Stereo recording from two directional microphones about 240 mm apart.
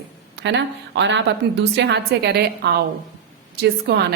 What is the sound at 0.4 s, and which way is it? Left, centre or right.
A woman's voice, right.